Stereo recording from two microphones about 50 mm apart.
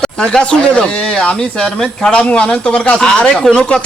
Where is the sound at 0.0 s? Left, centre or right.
Centre.